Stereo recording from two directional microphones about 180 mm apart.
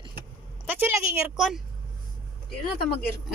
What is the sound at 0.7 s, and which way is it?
Speech, 5° right (ahead or behind).